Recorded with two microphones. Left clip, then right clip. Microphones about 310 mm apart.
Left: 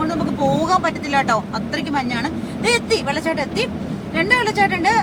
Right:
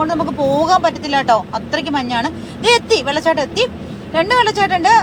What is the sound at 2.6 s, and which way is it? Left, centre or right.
Speech, centre.